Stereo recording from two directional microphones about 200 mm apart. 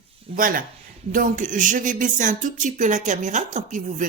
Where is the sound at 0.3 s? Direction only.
45° right (ahead or behind).